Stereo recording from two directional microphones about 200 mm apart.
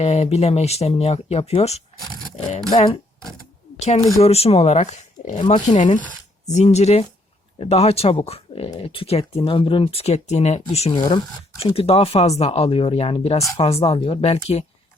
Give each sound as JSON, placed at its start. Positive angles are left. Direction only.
{"t": 0.0, "sound": "speech", "side_deg": 30}
{"t": 2.8, "sound": "a sound", "side_deg": 25}
{"t": 3.8, "sound": "speech", "side_deg": 30}